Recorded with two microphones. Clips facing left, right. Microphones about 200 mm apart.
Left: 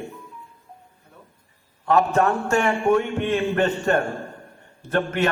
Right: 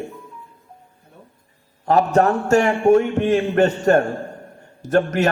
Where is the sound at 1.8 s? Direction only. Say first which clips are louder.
Right 3 dB; 40° right (ahead or behind).